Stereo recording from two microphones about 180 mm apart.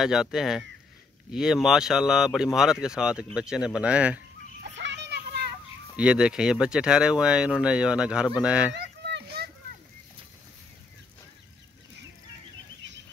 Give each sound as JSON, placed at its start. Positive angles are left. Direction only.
{"t": 0.0, "sound": "speech", "side_deg": -5}
{"t": 4.7, "sound": "children playing", "side_deg": -75}
{"t": 5.9, "sound": "speech", "side_deg": -5}
{"t": 8.7, "sound": "a sound", "side_deg": -65}